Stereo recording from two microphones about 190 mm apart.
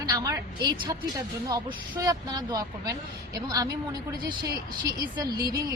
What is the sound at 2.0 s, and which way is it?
A woman's voice, 20° right (ahead or behind).